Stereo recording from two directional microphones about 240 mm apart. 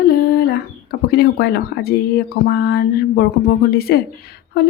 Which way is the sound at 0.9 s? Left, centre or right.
Left.